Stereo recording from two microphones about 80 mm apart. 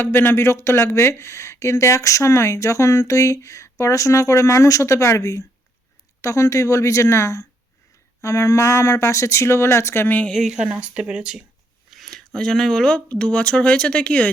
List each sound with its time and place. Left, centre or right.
0.0 s speech: left
10.1 s a woman's voice: centre
10.3 s speech: centre
10.7 s speech: centre
11.9 s speech: centre